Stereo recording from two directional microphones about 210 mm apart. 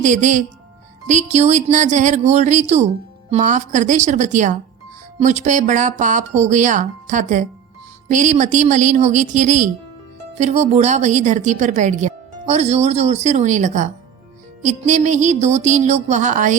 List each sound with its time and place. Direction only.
0.0 s speech: 35° right (ahead or behind)